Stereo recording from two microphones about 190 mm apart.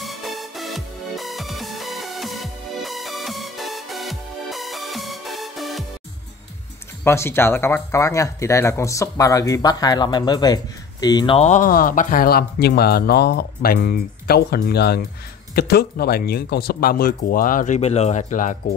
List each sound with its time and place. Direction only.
0.0 s music: centre (ahead or behind)
7.1 s speech: 15° left (ahead or behind); by 18.6 s 40° left (ahead or behind)